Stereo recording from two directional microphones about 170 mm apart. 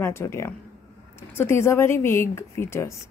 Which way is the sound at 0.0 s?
15° left (ahead or behind).